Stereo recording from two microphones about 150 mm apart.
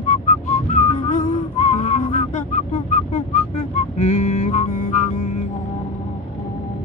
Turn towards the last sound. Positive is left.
turn(degrees=50)  # may be behind; listen again after turning